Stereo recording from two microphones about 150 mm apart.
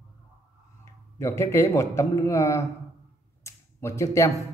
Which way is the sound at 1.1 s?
20° left (ahead or behind).